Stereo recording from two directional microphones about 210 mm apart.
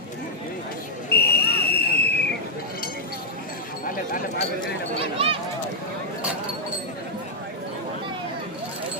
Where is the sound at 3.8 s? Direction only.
40° left (ahead or behind).